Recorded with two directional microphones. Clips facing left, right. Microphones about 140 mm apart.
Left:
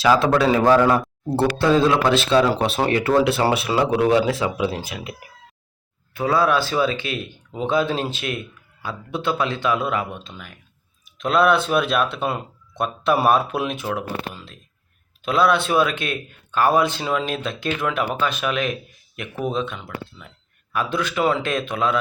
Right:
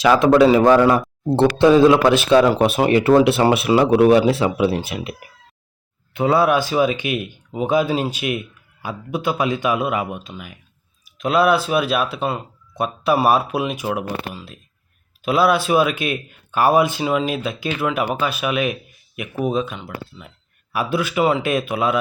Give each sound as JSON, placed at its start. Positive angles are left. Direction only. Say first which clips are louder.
{"t": 0.0, "sound": "speech", "louder": "right 4 dB", "side_deg": -15}
{"t": 6.1, "sound": "speech", "louder": "right 3 dB", "side_deg": -25}